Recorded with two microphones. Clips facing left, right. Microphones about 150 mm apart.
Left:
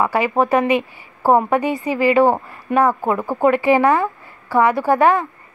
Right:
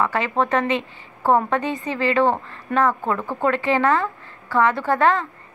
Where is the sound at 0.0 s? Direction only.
10° left (ahead or behind).